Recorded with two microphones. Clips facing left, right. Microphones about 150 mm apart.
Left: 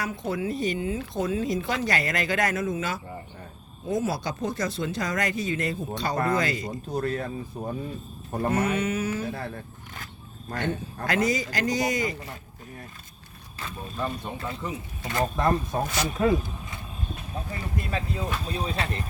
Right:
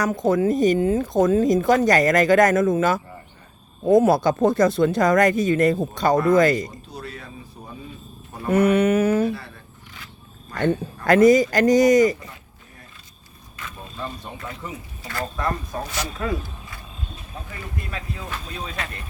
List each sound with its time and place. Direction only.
0.0 s speech: 45° right (ahead or behind)
6.9 s speech: 50° left (ahead or behind)
8.5 s a sound: 60° right (ahead or behind)
11.0 s speech: 50° right (ahead or behind)
14.3 s speech: 25° left (ahead or behind)
17.9 s speech: 25° left (ahead or behind)